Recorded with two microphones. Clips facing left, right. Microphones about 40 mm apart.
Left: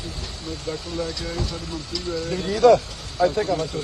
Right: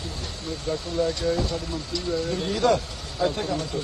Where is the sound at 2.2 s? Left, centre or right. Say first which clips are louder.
Left 8 dB; left.